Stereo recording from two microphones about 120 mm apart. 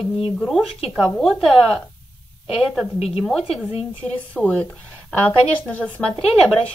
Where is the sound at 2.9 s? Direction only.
55° left (ahead or behind).